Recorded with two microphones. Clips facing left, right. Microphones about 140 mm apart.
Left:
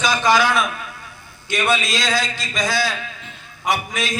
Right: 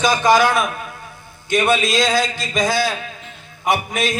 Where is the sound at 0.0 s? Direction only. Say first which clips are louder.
Right 3 dB; 50° right (ahead or behind).